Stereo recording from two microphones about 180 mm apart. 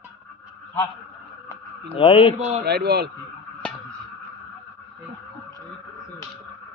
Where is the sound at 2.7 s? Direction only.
65° right (ahead or behind).